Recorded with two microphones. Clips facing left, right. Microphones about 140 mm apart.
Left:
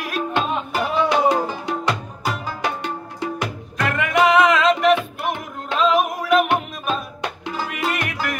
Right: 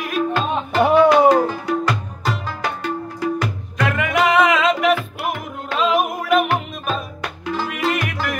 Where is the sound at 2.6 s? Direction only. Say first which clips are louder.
Right 2 dB; 20° left (ahead or behind).